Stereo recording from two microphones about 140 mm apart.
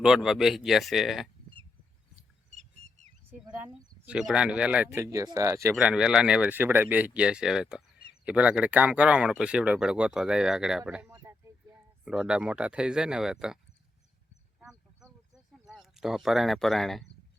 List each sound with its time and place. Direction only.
0.0 s speech: 5° right (ahead or behind)
2.6 s bird: 55° right (ahead or behind)
3.7 s speech: 5° right (ahead or behind); by 5.7 s 20° right (ahead or behind)
5.7 s speech: 5° right (ahead or behind)
11.1 s a sound: 20° right (ahead or behind)
12.0 s speech: 5° right (ahead or behind)
15.6 s speech: centre (ahead or behind)